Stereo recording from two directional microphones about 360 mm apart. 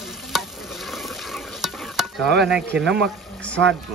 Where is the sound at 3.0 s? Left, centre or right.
Centre.